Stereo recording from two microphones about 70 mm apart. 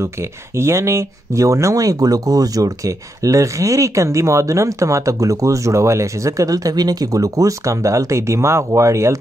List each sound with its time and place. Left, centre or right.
0.0 s speech: right